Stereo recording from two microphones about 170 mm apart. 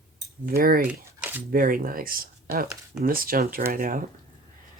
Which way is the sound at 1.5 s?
55° right (ahead or behind).